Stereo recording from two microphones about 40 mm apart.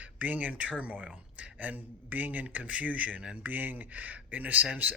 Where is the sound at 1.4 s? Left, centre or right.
Right.